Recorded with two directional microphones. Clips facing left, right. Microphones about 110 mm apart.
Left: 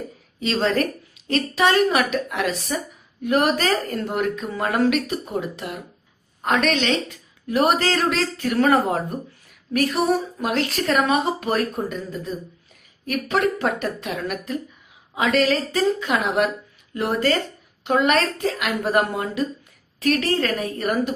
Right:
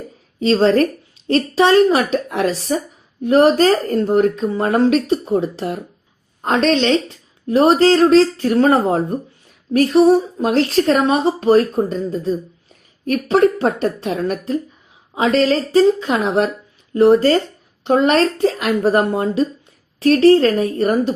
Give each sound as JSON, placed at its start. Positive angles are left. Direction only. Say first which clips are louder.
{"t": 0.3, "sound": "a woman's voice", "louder": "right 8 dB", "side_deg": -35}